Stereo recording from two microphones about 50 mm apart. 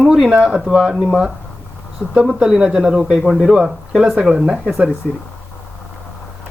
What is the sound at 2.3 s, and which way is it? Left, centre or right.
Speech, centre.